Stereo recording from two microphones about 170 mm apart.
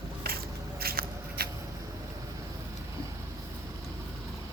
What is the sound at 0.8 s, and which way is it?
Shuffling cards, 60° right (ahead or behind).